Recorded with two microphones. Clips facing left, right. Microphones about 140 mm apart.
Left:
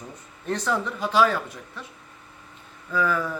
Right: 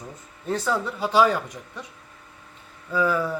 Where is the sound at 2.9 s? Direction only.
10° right (ahead or behind).